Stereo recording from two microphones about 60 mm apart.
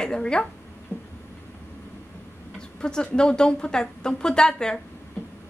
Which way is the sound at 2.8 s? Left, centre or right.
Centre.